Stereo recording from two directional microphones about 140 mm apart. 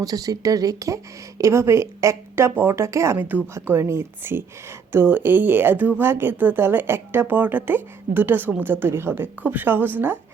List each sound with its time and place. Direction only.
0.0 s speech: 25° right (ahead or behind)